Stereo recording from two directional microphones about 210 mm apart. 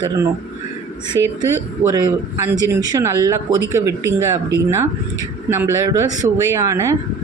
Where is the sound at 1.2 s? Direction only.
60° right (ahead or behind).